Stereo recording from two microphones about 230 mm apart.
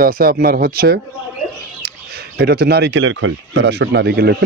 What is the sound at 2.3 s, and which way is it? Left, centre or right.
Speech, right.